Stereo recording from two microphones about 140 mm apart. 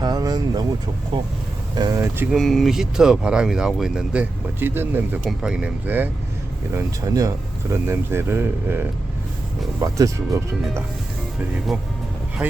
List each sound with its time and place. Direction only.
0.0 s vehicle: 30° right (ahead or behind)
1.7 s speech: 25° right (ahead or behind)
2.3 s speech: centre (ahead or behind); by 5.2 s 15° right (ahead or behind)
5.2 s speech: 5° right (ahead or behind)
6.7 s speech: 25° right (ahead or behind)
11.5 s speech: 5° right (ahead or behind)